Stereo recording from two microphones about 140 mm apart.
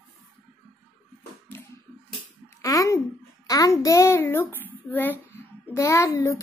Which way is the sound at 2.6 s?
25° left (ahead or behind).